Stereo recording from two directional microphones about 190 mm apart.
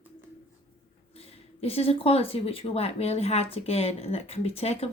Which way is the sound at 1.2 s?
30° left (ahead or behind).